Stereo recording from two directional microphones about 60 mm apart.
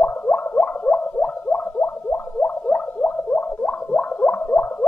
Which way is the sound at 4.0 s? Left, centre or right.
Left.